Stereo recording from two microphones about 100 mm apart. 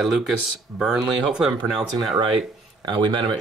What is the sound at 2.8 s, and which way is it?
Speech, 50° right (ahead or behind).